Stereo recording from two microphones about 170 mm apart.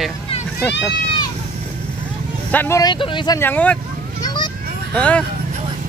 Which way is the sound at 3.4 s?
10° left (ahead or behind).